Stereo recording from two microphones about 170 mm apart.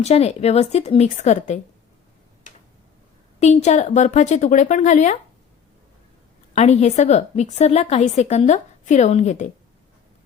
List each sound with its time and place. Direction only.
0.0 s a woman's voice: 40° left (ahead or behind)
3.4 s a woman's voice: 40° left (ahead or behind)
6.5 s a woman's voice: 40° left (ahead or behind)